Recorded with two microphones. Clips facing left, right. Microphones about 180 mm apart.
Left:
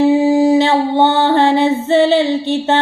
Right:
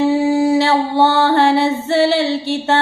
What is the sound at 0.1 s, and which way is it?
Music, 15° left (ahead or behind).